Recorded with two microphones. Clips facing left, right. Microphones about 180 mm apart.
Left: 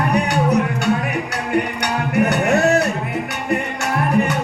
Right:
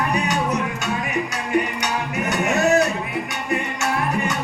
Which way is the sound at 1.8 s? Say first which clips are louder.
Left 6 dB; 65° left (ahead or behind).